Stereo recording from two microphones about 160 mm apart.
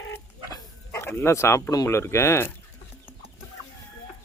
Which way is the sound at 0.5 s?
15° left (ahead or behind).